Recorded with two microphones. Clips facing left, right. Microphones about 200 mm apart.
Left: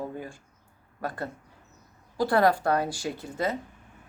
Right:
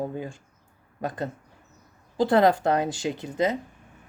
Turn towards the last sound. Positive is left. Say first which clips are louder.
# right 4 dB
turn(degrees=-20)  # may be behind; listen again after turning